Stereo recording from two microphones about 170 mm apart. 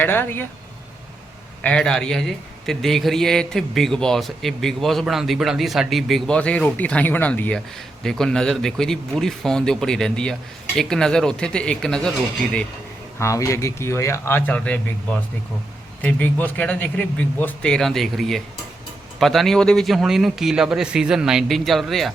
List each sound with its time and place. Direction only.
0.0 s speech: 10° left (ahead or behind)
1.6 s a man's voice: 5° left (ahead or behind)
13.1 s a man's voice: 15° left (ahead or behind); by 22.1 s centre (ahead or behind)